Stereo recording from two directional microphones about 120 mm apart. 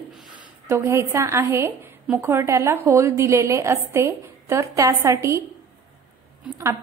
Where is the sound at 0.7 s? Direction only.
25° right (ahead or behind).